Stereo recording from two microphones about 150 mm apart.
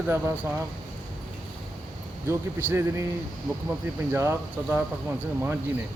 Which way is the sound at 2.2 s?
15° right (ahead or behind).